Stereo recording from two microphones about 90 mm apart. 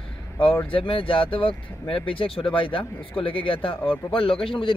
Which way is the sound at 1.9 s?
90° left.